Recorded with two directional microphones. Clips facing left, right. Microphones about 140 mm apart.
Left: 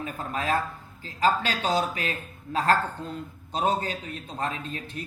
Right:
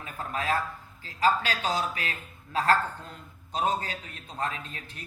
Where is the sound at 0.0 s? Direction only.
30° left (ahead or behind).